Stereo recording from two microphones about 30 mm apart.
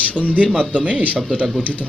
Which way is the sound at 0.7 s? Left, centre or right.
Right.